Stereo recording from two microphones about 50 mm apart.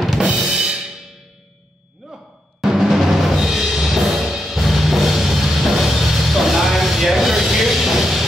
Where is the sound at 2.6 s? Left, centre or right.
Centre.